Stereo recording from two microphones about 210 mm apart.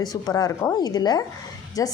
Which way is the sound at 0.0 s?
15° left (ahead or behind).